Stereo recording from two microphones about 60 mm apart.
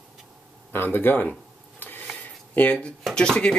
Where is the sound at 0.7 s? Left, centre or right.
Left.